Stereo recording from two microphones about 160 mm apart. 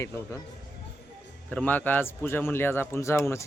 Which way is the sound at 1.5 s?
10° left (ahead or behind).